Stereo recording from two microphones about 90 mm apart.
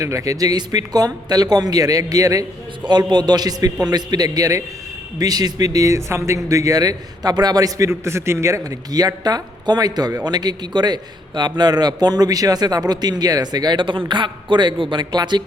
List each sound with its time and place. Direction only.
0.0 s a man's voice: 35° right (ahead or behind)
2.8 s a man's voice: 55° right (ahead or behind)
7.9 s a man's voice: 30° right (ahead or behind)
8.9 s a man's voice: 45° right (ahead or behind)